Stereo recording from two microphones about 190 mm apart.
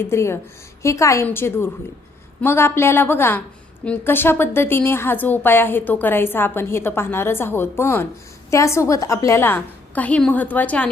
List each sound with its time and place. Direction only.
0.0 s a woman's voice: 15° left (ahead or behind)